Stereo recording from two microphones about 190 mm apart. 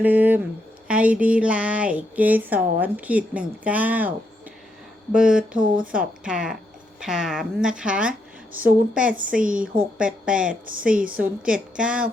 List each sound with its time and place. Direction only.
0.0 s speech: 10° right (ahead or behind)
5.1 s a woman's voice: 5° right (ahead or behind)
5.5 s speech: 45° right (ahead or behind)
6.2 s a woman's voice: 5° right (ahead or behind)
9.1 s speech: 45° right (ahead or behind)
10.0 s a woman's voice: 5° right (ahead or behind)
10.5 s speech: 45° right (ahead or behind)
11.2 s a woman's voice: 5° right (ahead or behind)